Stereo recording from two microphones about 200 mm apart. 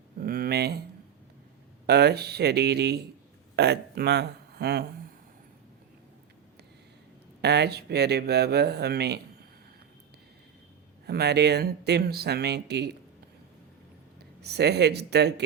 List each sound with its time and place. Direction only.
0.2 s a sound: 50° right (ahead or behind)
1.9 s speech: 55° right (ahead or behind)
7.4 s speech: 55° right (ahead or behind)
11.0 s speech: 55° right (ahead or behind)
14.2 s speech: 55° right (ahead or behind)